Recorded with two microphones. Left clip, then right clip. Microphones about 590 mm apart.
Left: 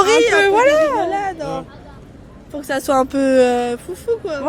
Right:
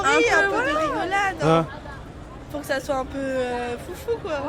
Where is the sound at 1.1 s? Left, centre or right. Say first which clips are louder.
Left 1 dB; centre.